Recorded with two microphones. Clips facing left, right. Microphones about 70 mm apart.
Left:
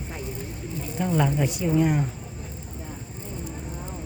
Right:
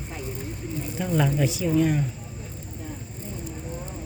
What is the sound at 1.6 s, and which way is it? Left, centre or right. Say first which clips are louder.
Speech: left 1 dB; centre.